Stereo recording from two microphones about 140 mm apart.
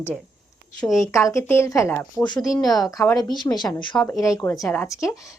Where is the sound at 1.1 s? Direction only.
20° left (ahead or behind).